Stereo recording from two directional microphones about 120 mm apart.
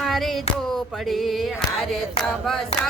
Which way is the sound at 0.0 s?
Centre (ahead or behind).